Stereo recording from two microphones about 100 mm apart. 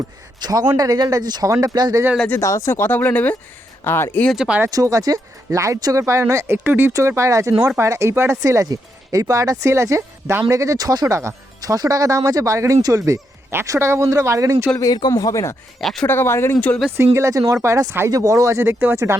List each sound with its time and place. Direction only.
0.3 s a man's voice: 45° right (ahead or behind)
2.4 s speech: 30° left (ahead or behind)
4.3 s speech: 5° right (ahead or behind)
4.7 s speech: 35° right (ahead or behind)
15.1 s speech: 35° left (ahead or behind)
15.8 s speech: 5° left (ahead or behind)
16.0 s speech: 25° left (ahead or behind)
17.2 s speech: 30° right (ahead or behind)